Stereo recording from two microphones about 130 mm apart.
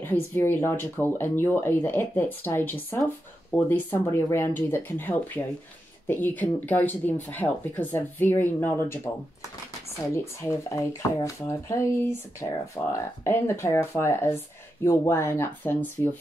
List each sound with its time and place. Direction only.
0.0 s speech: 15° left (ahead or behind)
10.1 s speech: 20° left (ahead or behind)